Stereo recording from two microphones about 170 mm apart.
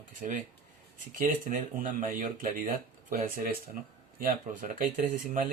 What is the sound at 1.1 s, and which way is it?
Speech, 55° right (ahead or behind).